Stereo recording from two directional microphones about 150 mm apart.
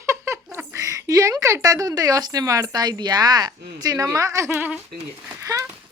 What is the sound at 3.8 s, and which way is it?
Speech, 25° right (ahead or behind).